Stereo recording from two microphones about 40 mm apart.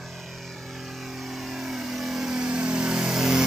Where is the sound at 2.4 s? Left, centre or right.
Right.